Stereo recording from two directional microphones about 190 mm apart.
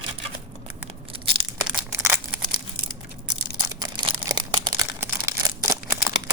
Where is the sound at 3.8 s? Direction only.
25° right (ahead or behind).